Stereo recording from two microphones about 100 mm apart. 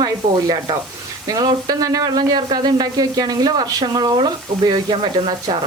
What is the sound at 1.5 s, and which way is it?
Speech, 40° right (ahead or behind).